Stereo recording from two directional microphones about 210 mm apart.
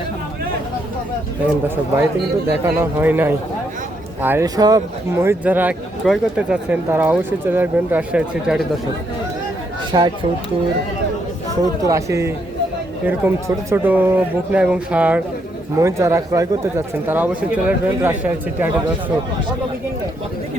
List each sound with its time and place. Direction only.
1.6 s speech: 10° right (ahead or behind)
9.9 s speech: 20° right (ahead or behind)
11.8 s speech: 15° right (ahead or behind)